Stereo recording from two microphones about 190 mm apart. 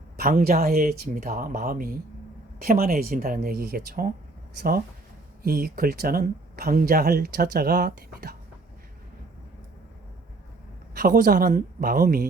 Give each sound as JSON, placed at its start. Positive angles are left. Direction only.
{"t": 0.2, "sound": "speech", "side_deg": -50}
{"t": 10.9, "sound": "speech", "side_deg": -45}